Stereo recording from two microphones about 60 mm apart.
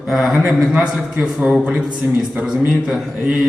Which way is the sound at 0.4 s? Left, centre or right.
Centre.